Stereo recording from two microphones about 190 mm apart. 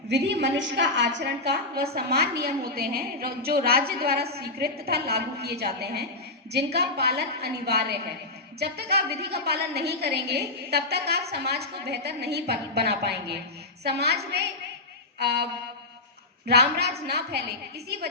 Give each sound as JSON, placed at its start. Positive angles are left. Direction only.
{"t": 0.1, "sound": "a woman's voice", "side_deg": -65}
{"t": 15.2, "sound": "a woman's voice", "side_deg": -60}
{"t": 16.5, "sound": "a woman's voice", "side_deg": -60}